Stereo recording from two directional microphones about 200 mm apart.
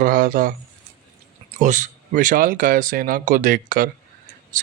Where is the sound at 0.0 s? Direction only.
45° right (ahead or behind).